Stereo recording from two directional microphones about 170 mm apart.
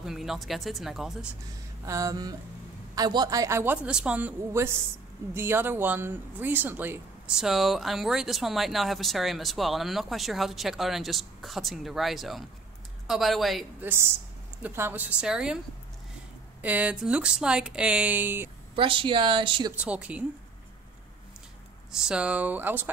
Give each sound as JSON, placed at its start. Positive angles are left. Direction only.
{"t": 0.0, "sound": "speech", "side_deg": 0}
{"t": 1.9, "sound": "a woman's voice", "side_deg": -20}
{"t": 13.8, "sound": "a woman's voice", "side_deg": -15}
{"t": 16.6, "sound": "speech", "side_deg": -10}
{"t": 18.8, "sound": "speech", "side_deg": -30}
{"t": 19.8, "sound": "a woman's voice", "side_deg": -5}
{"t": 21.9, "sound": "a woman's voice", "side_deg": -5}